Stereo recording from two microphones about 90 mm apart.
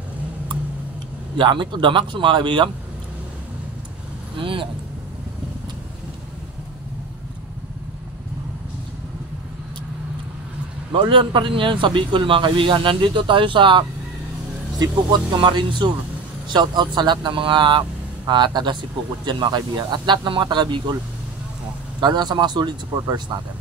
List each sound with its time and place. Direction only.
1.3 s speech: 60° right (ahead or behind)
4.4 s vehicle: 70° right (ahead or behind)
10.9 s speech: 70° right (ahead or behind)
15.3 s speech: 60° right (ahead or behind)
22.0 s speech: 50° right (ahead or behind)